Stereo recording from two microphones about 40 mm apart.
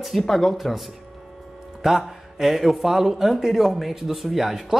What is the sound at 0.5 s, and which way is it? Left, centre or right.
Speech, centre.